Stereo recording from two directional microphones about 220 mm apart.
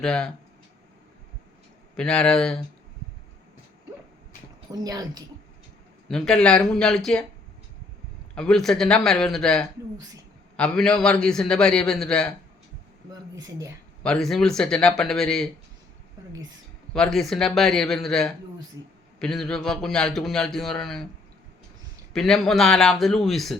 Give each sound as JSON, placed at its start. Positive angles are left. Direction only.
{"t": 0.0, "sound": "a man's voice", "side_deg": 5}
{"t": 2.0, "sound": "a man's voice", "side_deg": 5}
{"t": 4.7, "sound": "a woman's voice", "side_deg": -15}
{"t": 6.1, "sound": "a man's voice", "side_deg": 5}
{"t": 8.4, "sound": "a man's voice", "side_deg": 0}
{"t": 13.1, "sound": "speech", "side_deg": -15}
{"t": 14.0, "sound": "a man's voice", "side_deg": 5}
{"t": 16.3, "sound": "a woman's voice", "side_deg": -15}
{"t": 16.9, "sound": "a man's voice", "side_deg": 0}
{"t": 22.1, "sound": "a man's voice", "side_deg": 0}